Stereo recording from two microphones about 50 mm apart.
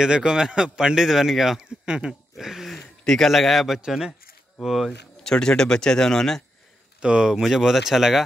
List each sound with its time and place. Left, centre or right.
0.0 s a man's voice: centre
1.9 s a man's voice: centre
2.3 s a sound: centre
2.7 s speech: centre
5.2 s speech: centre
7.0 s a man's voice: centre